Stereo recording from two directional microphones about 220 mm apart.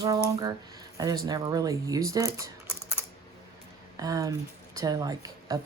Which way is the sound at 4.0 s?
15° right (ahead or behind).